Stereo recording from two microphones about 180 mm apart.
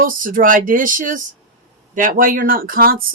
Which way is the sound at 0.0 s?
50° right (ahead or behind).